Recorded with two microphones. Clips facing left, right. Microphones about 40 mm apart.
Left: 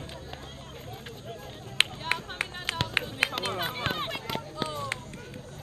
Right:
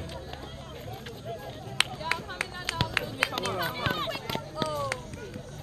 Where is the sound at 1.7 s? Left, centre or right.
Left.